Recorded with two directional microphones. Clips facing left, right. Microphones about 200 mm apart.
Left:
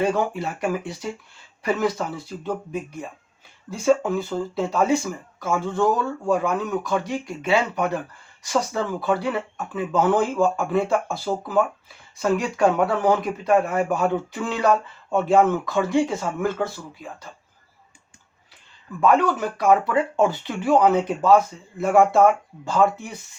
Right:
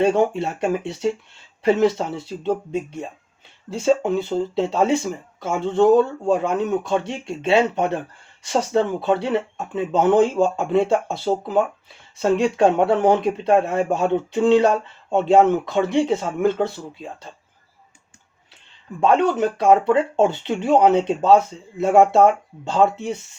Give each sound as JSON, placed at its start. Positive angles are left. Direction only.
{"t": 0.0, "sound": "speech", "side_deg": -25}
{"t": 18.9, "sound": "speech", "side_deg": -25}